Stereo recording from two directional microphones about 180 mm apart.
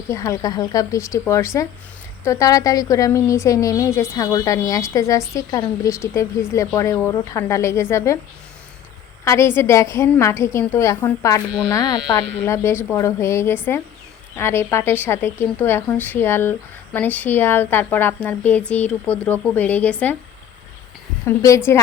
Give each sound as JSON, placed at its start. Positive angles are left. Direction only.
{"t": 0.1, "sound": "speech", "side_deg": 15}
{"t": 9.2, "sound": "speech", "side_deg": 15}
{"t": 21.2, "sound": "speech", "side_deg": 15}